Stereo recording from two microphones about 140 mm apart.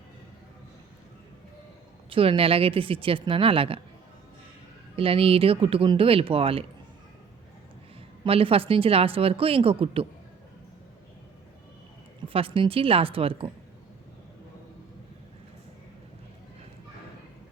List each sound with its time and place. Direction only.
2.0 s speech: 40° right (ahead or behind)
4.9 s speech: 40° right (ahead or behind)
8.2 s speech: 40° right (ahead or behind)
12.3 s speech: 40° right (ahead or behind)